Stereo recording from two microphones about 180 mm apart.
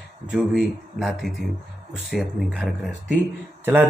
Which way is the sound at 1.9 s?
70° left (ahead or behind).